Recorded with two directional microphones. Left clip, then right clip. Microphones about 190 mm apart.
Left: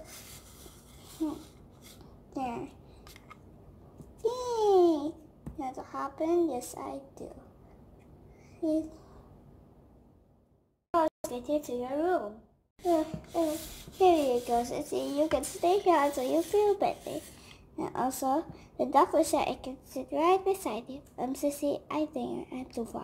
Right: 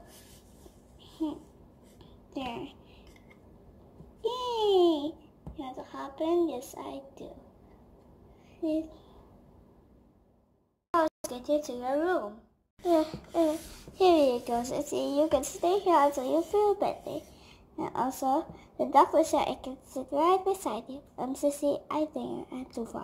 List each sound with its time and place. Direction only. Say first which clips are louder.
4.3 s a sound: even; 25° right (ahead or behind)
4.6 s a sound: left 1 dB; centre (ahead or behind)
5.6 s a woman's voice: left 3 dB; centre (ahead or behind)
8.6 s a child's voice: left 1 dB; centre (ahead or behind)
11.2 s a child's voice: right 2 dB; 15° right (ahead or behind)
15.3 s a woman's voice: even; 5° right (ahead or behind)